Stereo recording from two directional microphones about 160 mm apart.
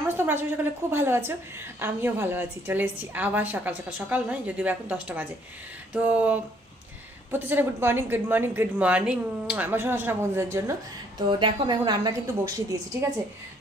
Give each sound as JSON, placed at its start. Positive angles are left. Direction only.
{"t": 0.1, "sound": "a woman's voice", "side_deg": -15}
{"t": 11.2, "sound": "speech", "side_deg": -30}